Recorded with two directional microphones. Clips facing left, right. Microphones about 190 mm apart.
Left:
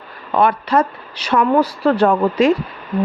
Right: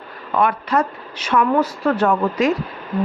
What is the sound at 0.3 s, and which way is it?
Speech, 35° left (ahead or behind).